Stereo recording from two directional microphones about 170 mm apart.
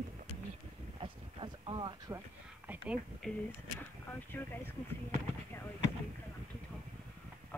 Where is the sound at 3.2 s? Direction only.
5° left (ahead or behind).